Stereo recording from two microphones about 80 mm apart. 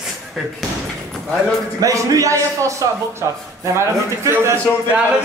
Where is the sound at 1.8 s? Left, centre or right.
Right.